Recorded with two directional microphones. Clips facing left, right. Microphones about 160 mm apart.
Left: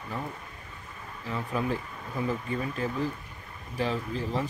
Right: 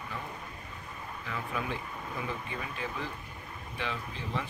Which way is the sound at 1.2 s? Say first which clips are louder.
Left 6 dB; 35° left (ahead or behind).